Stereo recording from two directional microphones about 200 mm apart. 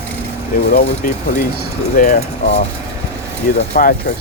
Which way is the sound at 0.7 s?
45° left (ahead or behind).